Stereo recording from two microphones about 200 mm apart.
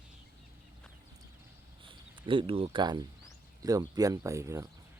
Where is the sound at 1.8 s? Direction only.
25° right (ahead or behind).